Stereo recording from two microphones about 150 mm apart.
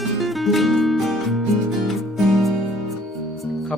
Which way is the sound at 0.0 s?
Centre (ahead or behind).